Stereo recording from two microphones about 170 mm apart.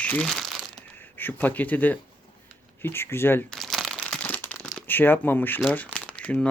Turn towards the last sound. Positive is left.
turn(degrees=5)  # may be behind; listen again after turning